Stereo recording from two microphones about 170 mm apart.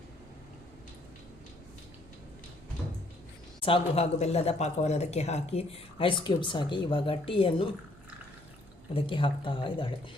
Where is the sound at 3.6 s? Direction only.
30° left (ahead or behind).